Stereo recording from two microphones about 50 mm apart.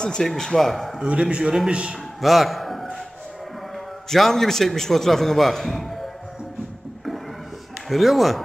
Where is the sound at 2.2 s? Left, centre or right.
Centre.